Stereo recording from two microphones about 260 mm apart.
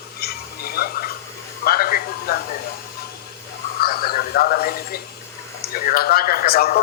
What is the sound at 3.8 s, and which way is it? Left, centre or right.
Frog, left.